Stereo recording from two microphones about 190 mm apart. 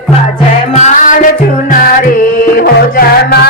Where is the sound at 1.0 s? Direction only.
40° left (ahead or behind).